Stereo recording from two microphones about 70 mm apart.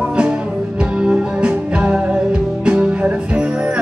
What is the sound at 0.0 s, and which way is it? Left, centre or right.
Music, centre.